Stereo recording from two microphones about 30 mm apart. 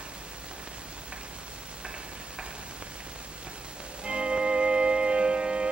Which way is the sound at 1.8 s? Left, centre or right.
Right.